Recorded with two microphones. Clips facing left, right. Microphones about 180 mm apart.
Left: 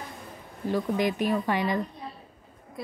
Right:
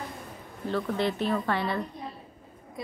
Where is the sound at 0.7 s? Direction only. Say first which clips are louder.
Left 2 dB; 15° left (ahead or behind).